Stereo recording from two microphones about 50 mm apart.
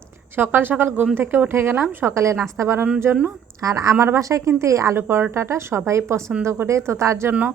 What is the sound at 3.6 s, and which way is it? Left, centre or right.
Speech, right.